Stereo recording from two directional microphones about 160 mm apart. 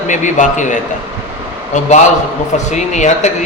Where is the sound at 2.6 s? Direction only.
50° left (ahead or behind).